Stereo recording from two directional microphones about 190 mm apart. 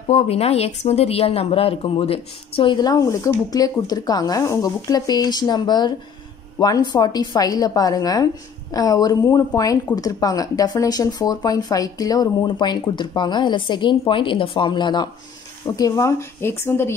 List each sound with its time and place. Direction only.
0.1 s speech: 35° left (ahead or behind); by 16.9 s 10° left (ahead or behind)